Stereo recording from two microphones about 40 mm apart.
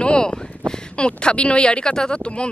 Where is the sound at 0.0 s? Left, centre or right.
Left.